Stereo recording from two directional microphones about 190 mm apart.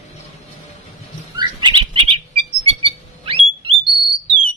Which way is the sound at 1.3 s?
25° right (ahead or behind).